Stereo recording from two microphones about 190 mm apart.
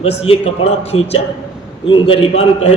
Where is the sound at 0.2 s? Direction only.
30° left (ahead or behind).